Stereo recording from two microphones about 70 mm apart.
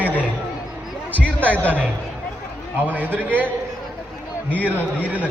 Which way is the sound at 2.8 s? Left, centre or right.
Right.